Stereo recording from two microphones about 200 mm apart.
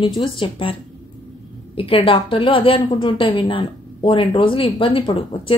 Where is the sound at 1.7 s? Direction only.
25° left (ahead or behind).